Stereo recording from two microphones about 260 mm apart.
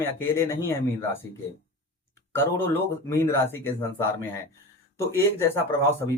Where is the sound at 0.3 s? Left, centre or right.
Centre.